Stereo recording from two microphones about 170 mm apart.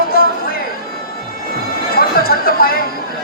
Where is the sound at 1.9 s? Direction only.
60° left (ahead or behind).